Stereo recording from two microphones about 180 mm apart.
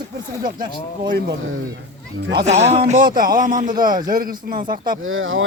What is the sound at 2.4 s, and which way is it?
Speech, 40° right (ahead or behind).